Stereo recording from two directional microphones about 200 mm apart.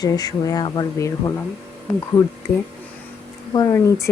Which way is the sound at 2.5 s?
15° left (ahead or behind).